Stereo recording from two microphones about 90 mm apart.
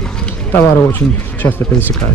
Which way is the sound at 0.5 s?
25° left (ahead or behind).